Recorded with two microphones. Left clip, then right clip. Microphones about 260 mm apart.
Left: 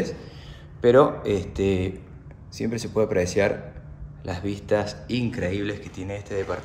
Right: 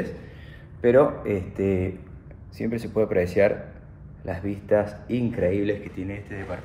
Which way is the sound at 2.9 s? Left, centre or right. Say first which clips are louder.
Even; centre.